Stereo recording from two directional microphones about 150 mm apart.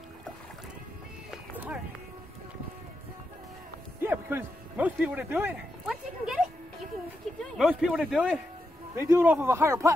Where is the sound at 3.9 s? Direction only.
15° right (ahead or behind).